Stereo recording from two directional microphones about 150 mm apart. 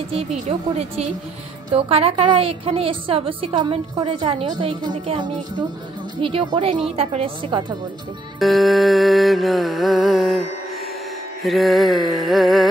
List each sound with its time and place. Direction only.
0.1 s a woman's voice: 45° right (ahead or behind)
8.4 s music: centre (ahead or behind)
11.4 s music: centre (ahead or behind)